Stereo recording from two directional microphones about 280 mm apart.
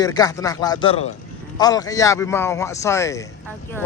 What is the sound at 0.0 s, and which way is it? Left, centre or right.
Speech, centre.